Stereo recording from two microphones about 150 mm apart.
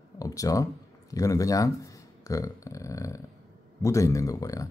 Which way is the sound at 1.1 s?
20° left (ahead or behind).